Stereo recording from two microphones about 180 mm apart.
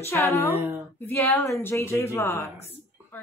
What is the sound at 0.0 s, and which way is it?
Speech, 15° left (ahead or behind).